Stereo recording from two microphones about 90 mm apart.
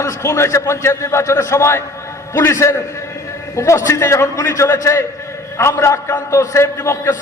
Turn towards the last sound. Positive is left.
turn(degrees=30)  # may be behind; listen again after turning